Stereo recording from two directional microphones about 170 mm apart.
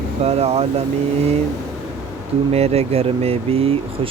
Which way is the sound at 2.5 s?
35° right (ahead or behind).